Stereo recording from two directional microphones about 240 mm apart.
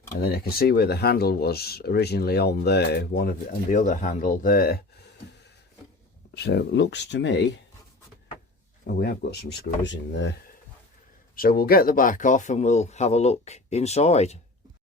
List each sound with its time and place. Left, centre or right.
0.2 s speech: left
6.3 s speech: left
9.0 s speech: left
11.3 s speech: left